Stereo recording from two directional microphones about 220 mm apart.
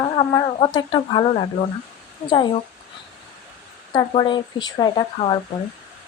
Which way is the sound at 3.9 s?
20° left (ahead or behind).